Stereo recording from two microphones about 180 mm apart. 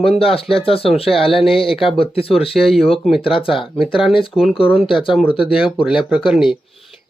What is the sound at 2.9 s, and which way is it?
Speech, centre (ahead or behind).